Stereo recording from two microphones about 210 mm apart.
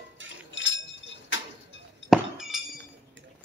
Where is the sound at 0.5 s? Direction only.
60° left (ahead or behind).